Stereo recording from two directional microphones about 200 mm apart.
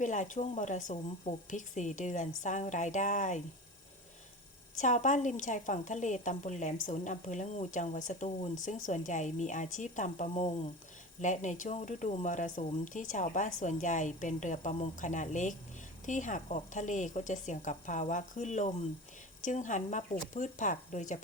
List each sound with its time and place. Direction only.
0.0 s speech: 35° left (ahead or behind)
4.8 s speech: 40° left (ahead or behind)